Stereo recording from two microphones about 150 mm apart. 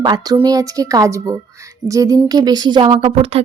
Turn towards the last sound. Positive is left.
turn(degrees=-40)  # may be behind; listen again after turning